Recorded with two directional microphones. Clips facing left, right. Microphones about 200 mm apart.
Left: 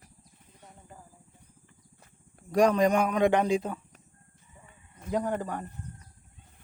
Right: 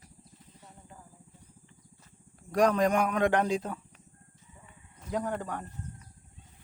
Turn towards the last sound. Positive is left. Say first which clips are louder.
# left 3 dB
turn(degrees=5)  # may be behind; listen again after turning